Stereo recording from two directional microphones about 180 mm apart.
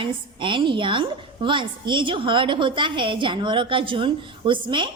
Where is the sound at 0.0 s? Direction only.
25° right (ahead or behind).